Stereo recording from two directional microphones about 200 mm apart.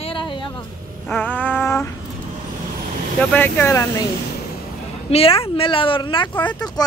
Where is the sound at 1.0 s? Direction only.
10° left (ahead or behind).